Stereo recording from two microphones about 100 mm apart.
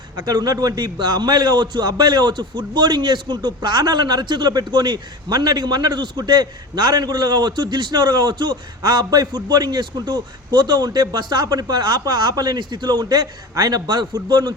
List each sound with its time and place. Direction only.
0.2 s a man's voice: 40° right (ahead or behind)